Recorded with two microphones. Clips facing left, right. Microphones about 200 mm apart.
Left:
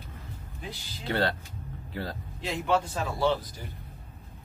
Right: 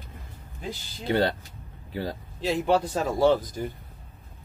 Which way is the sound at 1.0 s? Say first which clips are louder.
Right 4 dB; 15° right (ahead or behind).